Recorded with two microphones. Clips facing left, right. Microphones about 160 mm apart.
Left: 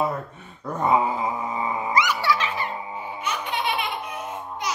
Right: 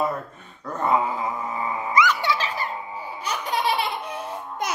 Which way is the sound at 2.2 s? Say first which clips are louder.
Left 1 dB; 35° right (ahead or behind).